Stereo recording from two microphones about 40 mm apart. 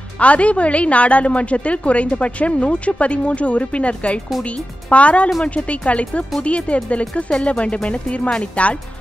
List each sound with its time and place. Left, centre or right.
0.2 s a woman's voice: left